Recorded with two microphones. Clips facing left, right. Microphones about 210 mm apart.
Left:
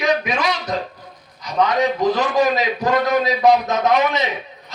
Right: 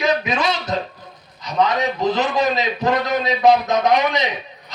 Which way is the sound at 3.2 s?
20° right (ahead or behind).